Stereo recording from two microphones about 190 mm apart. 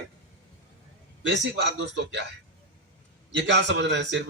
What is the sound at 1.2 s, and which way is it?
A man's voice, 70° right (ahead or behind).